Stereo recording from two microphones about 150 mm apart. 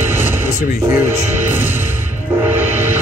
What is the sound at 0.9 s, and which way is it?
Speech, 15° right (ahead or behind).